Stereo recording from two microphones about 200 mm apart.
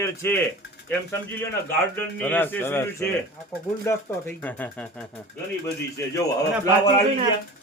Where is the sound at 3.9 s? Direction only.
10° left (ahead or behind).